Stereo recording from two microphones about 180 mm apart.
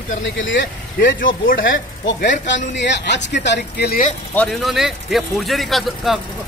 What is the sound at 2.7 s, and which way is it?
Speech, 75° left (ahead or behind).